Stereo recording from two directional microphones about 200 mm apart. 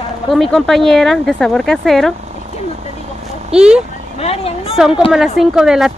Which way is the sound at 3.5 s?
5° right (ahead or behind).